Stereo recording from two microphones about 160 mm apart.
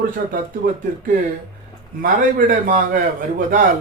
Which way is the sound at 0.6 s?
65° right (ahead or behind).